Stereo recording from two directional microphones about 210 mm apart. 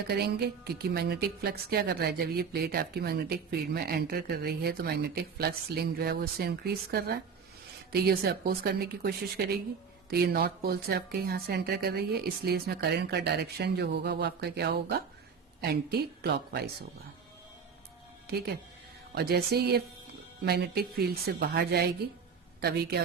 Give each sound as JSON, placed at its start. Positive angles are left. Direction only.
{"t": 0.1, "sound": "a woman's voice", "side_deg": -50}
{"t": 18.3, "sound": "a woman's voice", "side_deg": -50}